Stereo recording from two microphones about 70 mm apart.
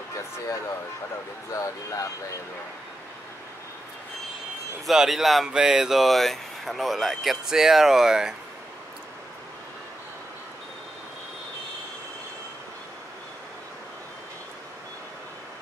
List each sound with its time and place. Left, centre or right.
1.5 s speech: left
4.8 s speech: centre